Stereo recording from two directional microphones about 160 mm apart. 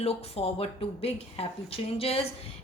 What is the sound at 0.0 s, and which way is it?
A woman's voice, 40° left (ahead or behind).